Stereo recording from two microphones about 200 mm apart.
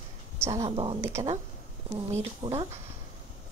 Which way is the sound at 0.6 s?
25° right (ahead or behind).